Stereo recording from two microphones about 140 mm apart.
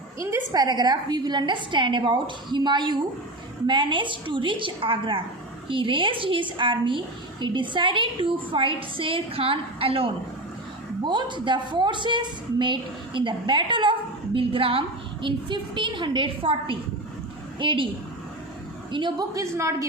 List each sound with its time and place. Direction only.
0.2 s a woman's voice: 20° right (ahead or behind); by 17.8 s 35° right (ahead or behind)
18.9 s a woman's voice: 35° right (ahead or behind)
19.4 s a woman's voice: 20° right (ahead or behind)